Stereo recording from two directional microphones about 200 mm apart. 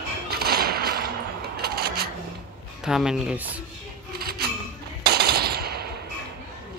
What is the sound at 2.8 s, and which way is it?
Speech, 5° right (ahead or behind).